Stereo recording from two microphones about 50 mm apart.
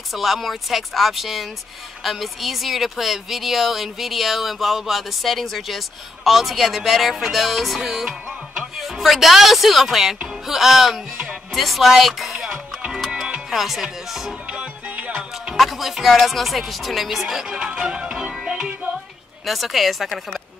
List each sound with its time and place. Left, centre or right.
0.1 s speech: centre
14.9 s music: right
15.5 s speech: centre
17.7 s music: centre
19.4 s speech: centre